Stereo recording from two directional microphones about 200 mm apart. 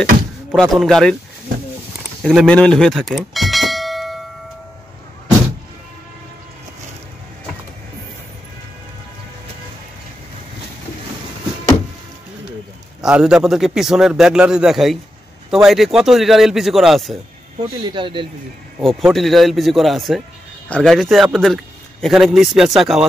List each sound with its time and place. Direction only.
0.6 s a man's voice: centre (ahead or behind)
2.2 s speech: 5° left (ahead or behind)
13.0 s a man's voice: 5° right (ahead or behind)
17.8 s speech: 25° right (ahead or behind)
18.8 s a man's voice: centre (ahead or behind)